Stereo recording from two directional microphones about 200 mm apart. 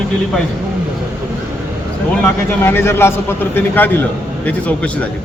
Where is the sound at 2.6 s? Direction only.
10° left (ahead or behind).